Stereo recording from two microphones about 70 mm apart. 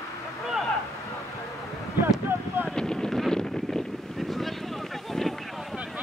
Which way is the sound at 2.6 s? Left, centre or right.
Centre.